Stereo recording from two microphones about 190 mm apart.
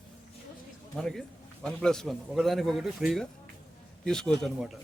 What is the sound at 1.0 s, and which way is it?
A man's voice, 5° left (ahead or behind).